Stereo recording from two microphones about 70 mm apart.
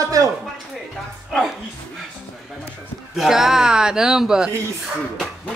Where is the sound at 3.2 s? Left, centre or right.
Centre.